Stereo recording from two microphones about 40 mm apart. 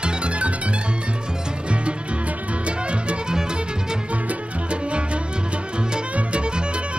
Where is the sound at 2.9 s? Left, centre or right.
Right.